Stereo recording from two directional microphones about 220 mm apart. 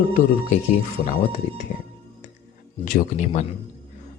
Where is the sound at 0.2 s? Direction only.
35° left (ahead or behind).